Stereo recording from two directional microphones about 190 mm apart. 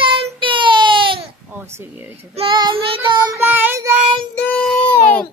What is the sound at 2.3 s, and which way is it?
Child singing, 25° right (ahead or behind).